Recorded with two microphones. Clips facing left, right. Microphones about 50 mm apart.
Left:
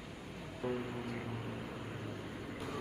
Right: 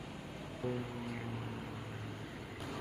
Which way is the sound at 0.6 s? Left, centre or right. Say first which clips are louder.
Left 1 dB; left.